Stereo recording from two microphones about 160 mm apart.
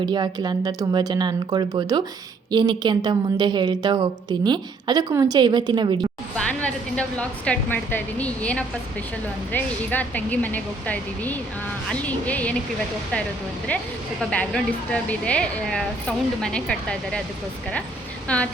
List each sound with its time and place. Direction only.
0.0 s a woman's voice: 25° right (ahead or behind)
6.3 s a woman's voice: 10° left (ahead or behind)
14.2 s speech: 5° left (ahead or behind)
18.3 s a woman's voice: 5° left (ahead or behind)